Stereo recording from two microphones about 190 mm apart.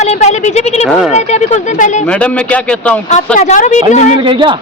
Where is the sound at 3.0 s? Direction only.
40° left (ahead or behind).